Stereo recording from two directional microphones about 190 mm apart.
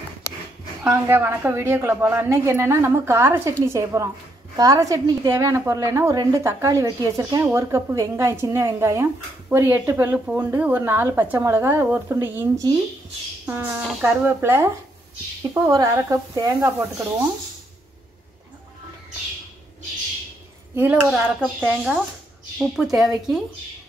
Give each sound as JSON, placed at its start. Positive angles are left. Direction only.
{"t": 0.8, "sound": "a woman's voice", "side_deg": -10}
{"t": 20.7, "sound": "a woman's voice", "side_deg": -10}